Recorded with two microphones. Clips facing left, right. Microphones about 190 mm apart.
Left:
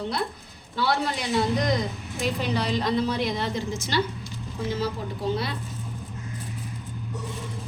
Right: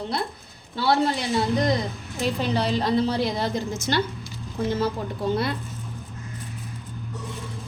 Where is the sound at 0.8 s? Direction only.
25° right (ahead or behind).